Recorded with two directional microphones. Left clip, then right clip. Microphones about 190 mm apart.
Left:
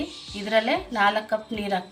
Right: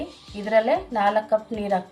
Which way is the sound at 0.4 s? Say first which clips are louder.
Right 3 dB; 20° right (ahead or behind).